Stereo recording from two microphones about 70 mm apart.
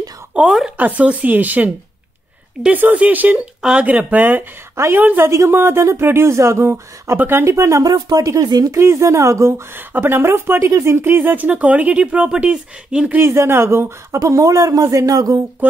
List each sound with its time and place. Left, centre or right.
0.5 s speech: centre
0.7 s speech: right
7.5 s speech: right
7.8 s speech: right
8.7 s speech: right
9.8 s speech: right; by 13.1 s centre
13.2 s speech: right
14.2 s speech: right